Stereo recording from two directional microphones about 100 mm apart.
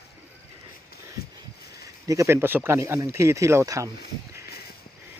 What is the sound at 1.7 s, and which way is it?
Speech, 35° right (ahead or behind).